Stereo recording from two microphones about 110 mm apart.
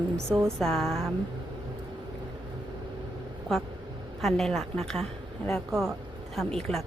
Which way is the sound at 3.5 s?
5° left (ahead or behind).